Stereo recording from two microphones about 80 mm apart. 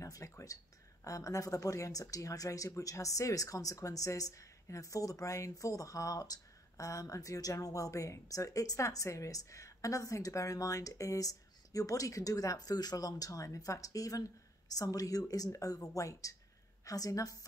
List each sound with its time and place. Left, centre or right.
0.0 s speech: left